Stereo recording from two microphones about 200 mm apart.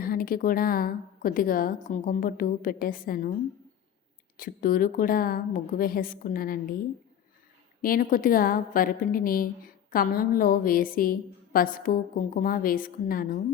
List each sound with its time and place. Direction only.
0.0 s a woman's voice: 45° left (ahead or behind)
4.4 s a woman's voice: 45° left (ahead or behind)
7.8 s a woman's voice: 45° left (ahead or behind)